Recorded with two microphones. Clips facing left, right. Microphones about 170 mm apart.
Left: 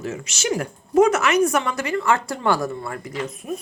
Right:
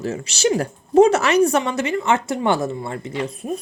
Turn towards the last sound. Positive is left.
turn(degrees=-30)  # may be behind; listen again after turning